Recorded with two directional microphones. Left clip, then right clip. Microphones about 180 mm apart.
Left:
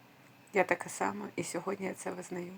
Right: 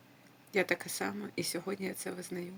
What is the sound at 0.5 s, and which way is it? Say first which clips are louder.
Speech: left 2 dB; 15° right (ahead or behind).